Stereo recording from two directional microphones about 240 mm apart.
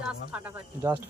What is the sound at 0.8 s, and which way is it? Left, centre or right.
Speech, centre.